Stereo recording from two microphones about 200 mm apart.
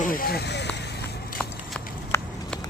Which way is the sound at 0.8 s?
55° left (ahead or behind).